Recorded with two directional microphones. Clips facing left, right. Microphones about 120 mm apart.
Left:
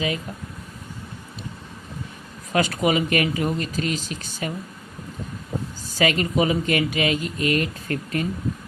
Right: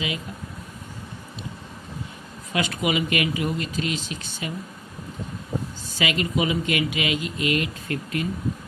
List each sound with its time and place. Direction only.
2.5 s speech: 40° left (ahead or behind)
6.0 s speech: 40° left (ahead or behind)